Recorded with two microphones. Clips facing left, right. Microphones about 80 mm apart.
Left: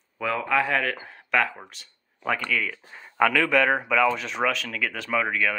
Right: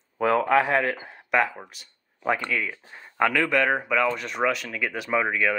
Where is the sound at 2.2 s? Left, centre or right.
Right.